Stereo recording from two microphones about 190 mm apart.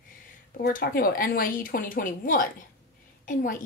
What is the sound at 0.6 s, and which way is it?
A woman's voice, 55° left (ahead or behind).